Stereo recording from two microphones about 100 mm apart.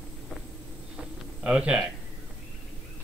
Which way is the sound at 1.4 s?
10° right (ahead or behind).